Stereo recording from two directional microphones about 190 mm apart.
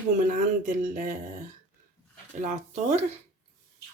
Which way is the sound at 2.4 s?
40° right (ahead or behind).